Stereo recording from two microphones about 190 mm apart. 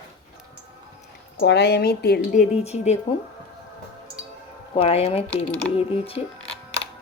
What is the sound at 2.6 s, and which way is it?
Speech, 35° left (ahead or behind).